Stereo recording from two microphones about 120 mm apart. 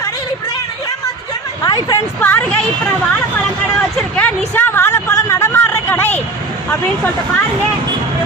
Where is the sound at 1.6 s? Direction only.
35° left (ahead or behind).